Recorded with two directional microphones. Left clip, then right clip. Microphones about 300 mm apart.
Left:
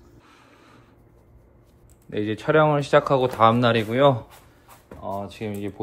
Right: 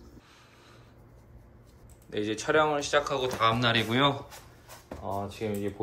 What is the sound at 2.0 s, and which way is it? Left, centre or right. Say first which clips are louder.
Speech: left 5 dB; left.